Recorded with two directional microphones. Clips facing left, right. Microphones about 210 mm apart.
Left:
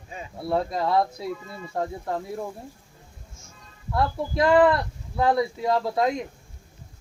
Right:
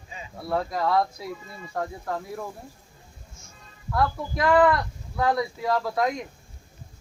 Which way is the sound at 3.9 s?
25° left (ahead or behind).